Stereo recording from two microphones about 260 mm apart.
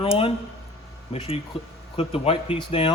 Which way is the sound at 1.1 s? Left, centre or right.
Left.